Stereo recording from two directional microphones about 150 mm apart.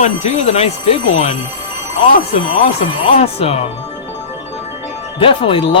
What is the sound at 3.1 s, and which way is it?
Speech, 45° left (ahead or behind).